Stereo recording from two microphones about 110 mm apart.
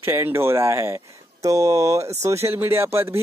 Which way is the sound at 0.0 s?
20° right (ahead or behind).